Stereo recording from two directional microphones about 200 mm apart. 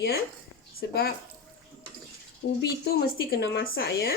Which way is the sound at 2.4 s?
60° left (ahead or behind).